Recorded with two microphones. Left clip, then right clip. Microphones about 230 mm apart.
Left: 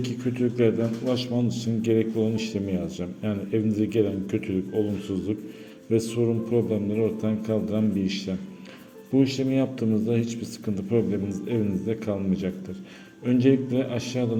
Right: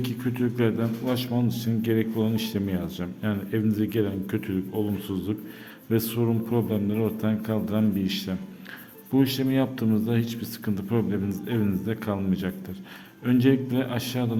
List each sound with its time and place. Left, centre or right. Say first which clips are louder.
0.0 s a man's voice: left 1 dB; centre